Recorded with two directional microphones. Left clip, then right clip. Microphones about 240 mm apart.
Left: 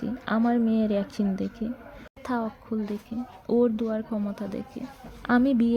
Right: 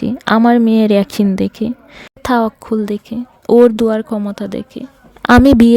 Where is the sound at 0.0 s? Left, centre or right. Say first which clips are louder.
Right 15 dB; right.